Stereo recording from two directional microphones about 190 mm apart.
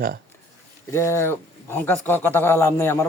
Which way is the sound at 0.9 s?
15° left (ahead or behind).